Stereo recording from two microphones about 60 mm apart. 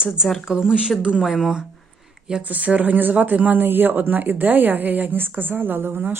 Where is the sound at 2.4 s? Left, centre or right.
Right.